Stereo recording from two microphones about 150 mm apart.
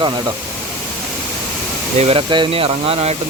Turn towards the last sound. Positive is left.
turn(degrees=-40)  # may be behind; listen again after turning